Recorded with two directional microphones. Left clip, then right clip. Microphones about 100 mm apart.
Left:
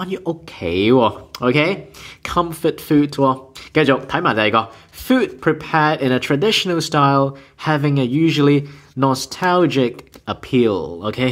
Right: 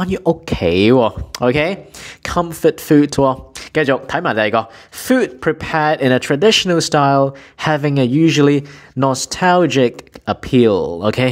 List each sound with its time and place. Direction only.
0.0 s speech: 40° right (ahead or behind)
2.2 s a sound: 35° right (ahead or behind)
2.6 s speech: 35° right (ahead or behind)
3.2 s speech: 50° right (ahead or behind); by 7.3 s 30° right (ahead or behind)
7.6 s speech: 45° right (ahead or behind)